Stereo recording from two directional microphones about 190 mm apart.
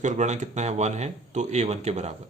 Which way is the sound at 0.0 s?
40° right (ahead or behind).